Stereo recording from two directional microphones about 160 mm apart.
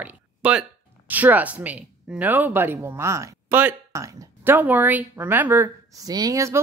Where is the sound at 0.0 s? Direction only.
10° right (ahead or behind).